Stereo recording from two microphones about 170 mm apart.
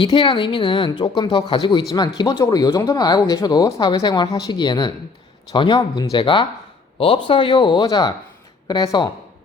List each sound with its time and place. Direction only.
0.0 s a woman's voice: 30° left (ahead or behind)